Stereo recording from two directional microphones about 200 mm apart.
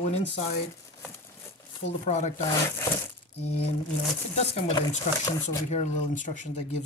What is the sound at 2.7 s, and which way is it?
Speech, 10° left (ahead or behind).